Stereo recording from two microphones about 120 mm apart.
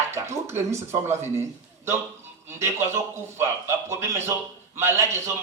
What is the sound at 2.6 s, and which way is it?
A man's voice, 20° right (ahead or behind).